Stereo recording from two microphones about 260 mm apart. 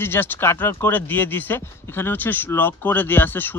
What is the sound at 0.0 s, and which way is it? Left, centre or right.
Speech, centre.